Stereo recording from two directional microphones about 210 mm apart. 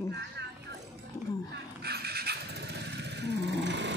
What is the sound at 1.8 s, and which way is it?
Motorcycle, 50° right (ahead or behind).